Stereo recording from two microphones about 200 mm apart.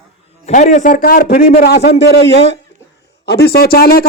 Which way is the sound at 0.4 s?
35° left (ahead or behind).